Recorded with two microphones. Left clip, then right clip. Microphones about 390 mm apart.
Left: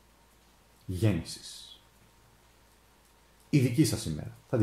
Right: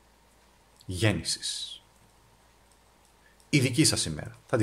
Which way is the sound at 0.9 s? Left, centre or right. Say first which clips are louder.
Right 5 dB; right.